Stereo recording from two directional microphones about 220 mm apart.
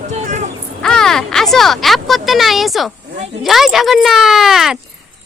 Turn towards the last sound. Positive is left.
turn(degrees=0)  # may be behind; listen again after turning